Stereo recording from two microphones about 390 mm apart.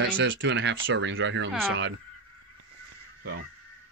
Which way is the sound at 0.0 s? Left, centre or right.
Right.